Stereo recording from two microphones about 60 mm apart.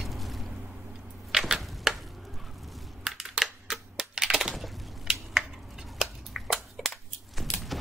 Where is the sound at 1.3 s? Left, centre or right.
Centre.